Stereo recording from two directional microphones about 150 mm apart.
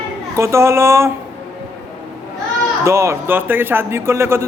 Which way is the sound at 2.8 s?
20° right (ahead or behind).